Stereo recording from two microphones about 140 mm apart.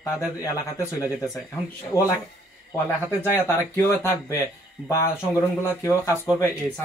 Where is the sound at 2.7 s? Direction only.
15° left (ahead or behind).